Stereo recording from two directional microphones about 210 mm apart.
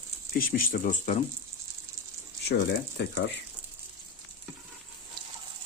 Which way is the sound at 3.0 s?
55° left (ahead or behind).